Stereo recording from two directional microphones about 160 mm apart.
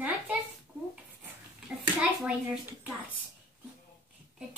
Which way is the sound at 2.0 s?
5° right (ahead or behind).